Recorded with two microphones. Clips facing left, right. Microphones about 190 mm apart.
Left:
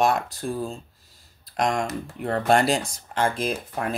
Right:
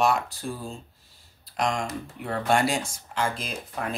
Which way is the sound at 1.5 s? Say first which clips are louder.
Left 3 dB; 45° left (ahead or behind).